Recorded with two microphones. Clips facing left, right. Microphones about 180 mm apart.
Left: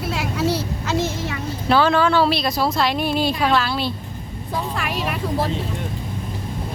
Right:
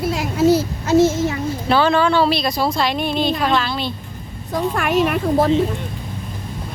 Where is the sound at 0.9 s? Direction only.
45° right (ahead or behind).